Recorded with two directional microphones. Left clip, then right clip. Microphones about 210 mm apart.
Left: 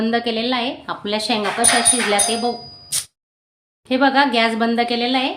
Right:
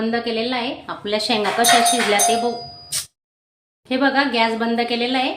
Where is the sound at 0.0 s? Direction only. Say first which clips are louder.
Left 2 dB; 20° left (ahead or behind); by 2.0 s centre (ahead or behind).